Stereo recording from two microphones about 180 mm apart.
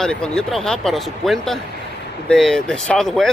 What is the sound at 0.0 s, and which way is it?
Speech, 5° left (ahead or behind).